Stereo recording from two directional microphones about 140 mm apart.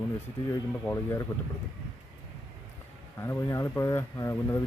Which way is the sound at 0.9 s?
20° left (ahead or behind).